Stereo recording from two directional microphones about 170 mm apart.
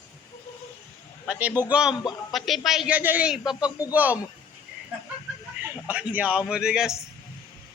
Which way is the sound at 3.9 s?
10° right (ahead or behind).